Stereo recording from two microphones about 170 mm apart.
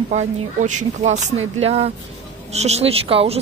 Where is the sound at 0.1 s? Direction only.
45° right (ahead or behind).